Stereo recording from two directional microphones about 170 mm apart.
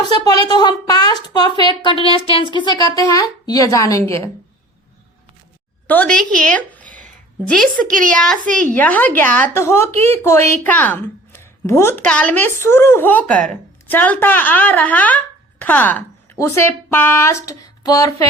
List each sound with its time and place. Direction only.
0.1 s a woman's voice: 25° left (ahead or behind)
2.6 s a woman's voice: 20° left (ahead or behind)
5.9 s a woman's voice: 5° left (ahead or behind)
6.8 s a sound: 50° right (ahead or behind)
7.4 s a woman's voice: 5° left (ahead or behind)
7.9 s speech: 55° right (ahead or behind)
8.1 s a woman's voice: 5° left (ahead or behind); by 18.1 s 20° left (ahead or behind)